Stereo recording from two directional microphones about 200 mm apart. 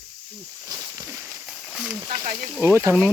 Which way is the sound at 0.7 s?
15° right (ahead or behind).